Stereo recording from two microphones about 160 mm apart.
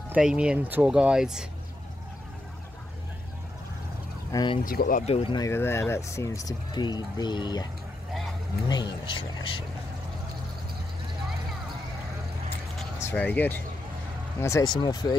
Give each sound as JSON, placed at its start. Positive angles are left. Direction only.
{"t": 0.1, "sound": "speech", "side_deg": -5}
{"t": 4.3, "sound": "speech", "side_deg": 25}
{"t": 4.6, "sound": "speech", "side_deg": 60}
{"t": 5.0, "sound": "speech", "side_deg": 35}
{"t": 5.4, "sound": "speech", "side_deg": 15}
{"t": 8.6, "sound": "speech", "side_deg": 25}
{"t": 13.0, "sound": "speech", "side_deg": 10}